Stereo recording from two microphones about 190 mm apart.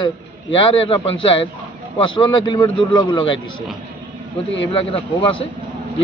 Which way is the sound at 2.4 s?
25° left (ahead or behind).